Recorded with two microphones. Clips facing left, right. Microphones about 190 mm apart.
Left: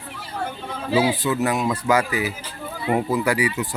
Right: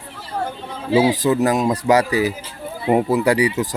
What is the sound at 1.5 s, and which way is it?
Speech, 35° right (ahead or behind).